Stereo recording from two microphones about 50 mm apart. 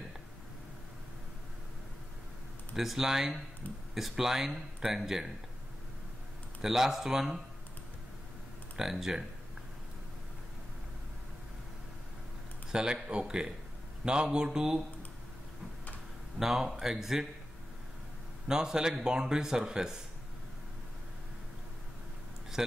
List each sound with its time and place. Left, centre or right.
2.7 s speech: centre
6.6 s speech: centre
8.7 s speech: centre
12.7 s speech: centre
16.3 s speech: centre
18.5 s speech: centre
22.6 s speech: centre